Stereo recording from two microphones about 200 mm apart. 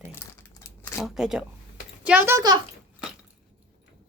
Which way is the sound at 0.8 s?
15° left (ahead or behind).